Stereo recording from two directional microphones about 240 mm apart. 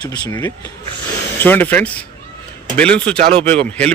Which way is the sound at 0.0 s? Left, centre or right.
Centre.